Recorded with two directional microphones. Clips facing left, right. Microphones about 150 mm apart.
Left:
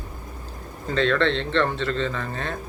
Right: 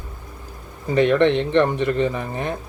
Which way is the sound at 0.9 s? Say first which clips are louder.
Right 5 dB; 15° right (ahead or behind).